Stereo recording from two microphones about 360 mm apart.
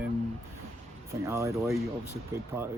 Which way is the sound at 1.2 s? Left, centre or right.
Centre.